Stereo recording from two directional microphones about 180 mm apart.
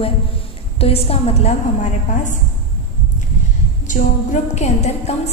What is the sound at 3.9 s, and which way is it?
A woman's voice, 40° left (ahead or behind).